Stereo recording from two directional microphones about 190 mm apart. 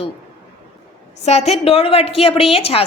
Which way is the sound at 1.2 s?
35° left (ahead or behind).